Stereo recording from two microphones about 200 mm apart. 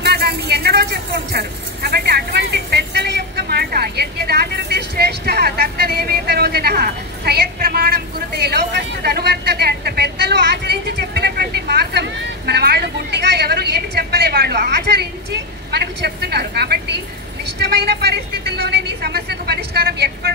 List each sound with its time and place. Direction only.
0.0 s vehicle: 55° right (ahead or behind)
15.7 s a sound: 55° right (ahead or behind)
17.6 s vehicle: 55° right (ahead or behind)